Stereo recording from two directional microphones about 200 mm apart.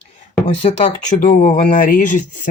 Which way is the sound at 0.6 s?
30° left (ahead or behind).